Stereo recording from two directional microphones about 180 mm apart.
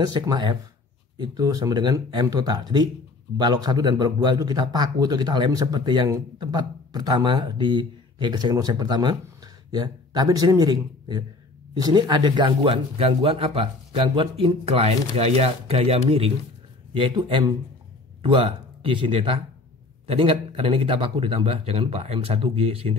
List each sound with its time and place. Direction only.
0.0 s a man's voice: 25° right (ahead or behind)